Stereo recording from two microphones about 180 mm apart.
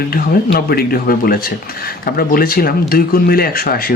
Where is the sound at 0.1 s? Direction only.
55° left (ahead or behind).